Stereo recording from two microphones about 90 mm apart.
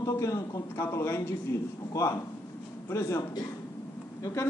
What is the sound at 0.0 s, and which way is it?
A man's voice, 35° left (ahead or behind).